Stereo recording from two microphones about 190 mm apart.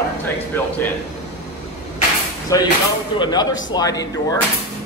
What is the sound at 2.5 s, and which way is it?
Speech, 20° left (ahead or behind).